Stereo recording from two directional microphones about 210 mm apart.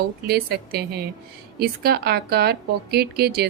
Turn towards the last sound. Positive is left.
turn(degrees=-50)  # may be behind; listen again after turning